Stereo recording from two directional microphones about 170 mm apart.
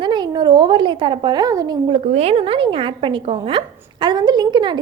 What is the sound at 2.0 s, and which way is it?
A woman's voice, 40° right (ahead or behind).